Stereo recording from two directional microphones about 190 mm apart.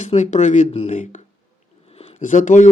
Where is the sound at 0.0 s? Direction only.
35° left (ahead or behind).